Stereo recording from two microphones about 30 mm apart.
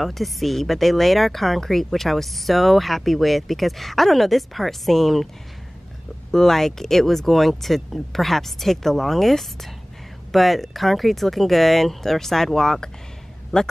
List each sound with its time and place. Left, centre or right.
0.0 s speech: centre
6.3 s speech: centre
13.5 s speech: left